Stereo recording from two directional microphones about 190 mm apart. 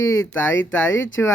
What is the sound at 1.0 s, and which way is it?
Speech, 85° left.